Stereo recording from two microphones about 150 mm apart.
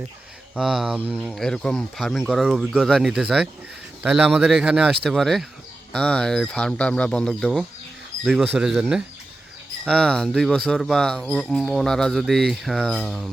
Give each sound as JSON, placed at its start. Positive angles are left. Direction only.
{"t": 0.5, "sound": "speech", "side_deg": -5}
{"t": 9.9, "sound": "speech", "side_deg": 5}